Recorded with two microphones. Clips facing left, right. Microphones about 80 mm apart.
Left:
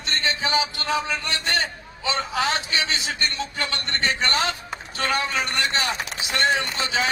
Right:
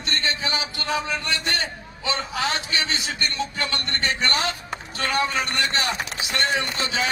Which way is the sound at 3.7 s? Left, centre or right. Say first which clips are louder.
Left 2 dB; left.